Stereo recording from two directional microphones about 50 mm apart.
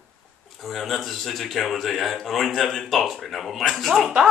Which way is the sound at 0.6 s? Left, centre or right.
Centre.